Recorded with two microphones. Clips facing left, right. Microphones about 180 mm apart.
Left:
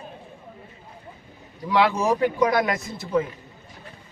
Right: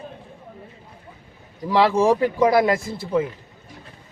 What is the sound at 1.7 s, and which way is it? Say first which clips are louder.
A man's voice: right 4 dB; 30° right (ahead or behind).